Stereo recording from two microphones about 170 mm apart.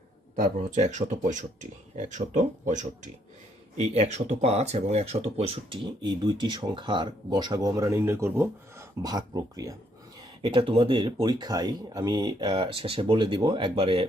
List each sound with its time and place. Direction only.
0.3 s speech: 45° right (ahead or behind)